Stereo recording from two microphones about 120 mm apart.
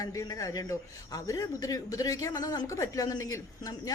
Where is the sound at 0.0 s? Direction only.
30° left (ahead or behind).